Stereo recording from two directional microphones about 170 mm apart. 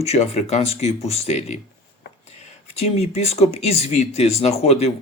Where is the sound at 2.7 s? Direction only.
40° left (ahead or behind).